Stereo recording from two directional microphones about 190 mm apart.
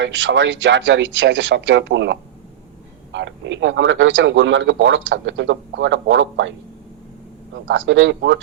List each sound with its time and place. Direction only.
0.0 s a man's voice: 75° right (ahead or behind)
7.7 s a man's voice: 75° right (ahead or behind)